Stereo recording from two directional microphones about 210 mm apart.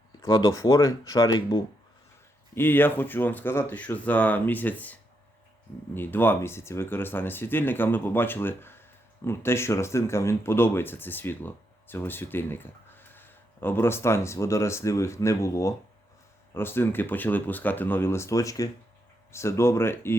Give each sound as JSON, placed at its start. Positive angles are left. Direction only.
{"t": 0.2, "sound": "speech", "side_deg": 20}
{"t": 2.6, "sound": "speech", "side_deg": 10}